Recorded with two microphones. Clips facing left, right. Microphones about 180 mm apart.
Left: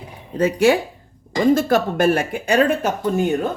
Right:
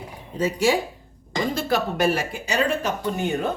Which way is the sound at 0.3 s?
55° left (ahead or behind).